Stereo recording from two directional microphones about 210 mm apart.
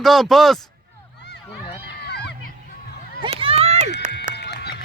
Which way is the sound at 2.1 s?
50° left (ahead or behind).